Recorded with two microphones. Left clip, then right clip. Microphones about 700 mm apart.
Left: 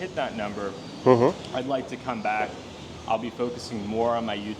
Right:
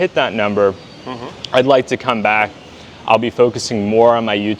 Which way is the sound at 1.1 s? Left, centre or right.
Left.